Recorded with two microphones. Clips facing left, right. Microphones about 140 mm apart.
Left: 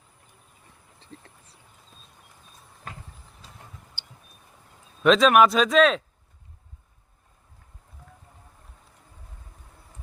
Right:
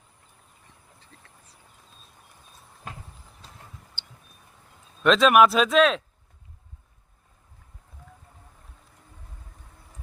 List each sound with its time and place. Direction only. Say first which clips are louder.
1.1 s speech: left 11 dB; 30° left (ahead or behind)
5.0 s speech: even; centre (ahead or behind)